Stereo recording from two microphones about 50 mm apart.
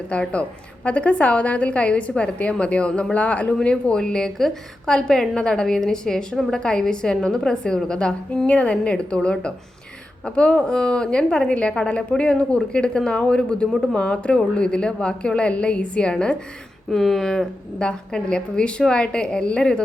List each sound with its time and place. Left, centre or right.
0.1 s a woman's voice: left
16.9 s a woman's voice: centre